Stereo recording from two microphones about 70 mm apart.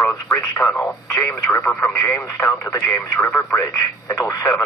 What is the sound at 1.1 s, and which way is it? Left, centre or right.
Speech, left.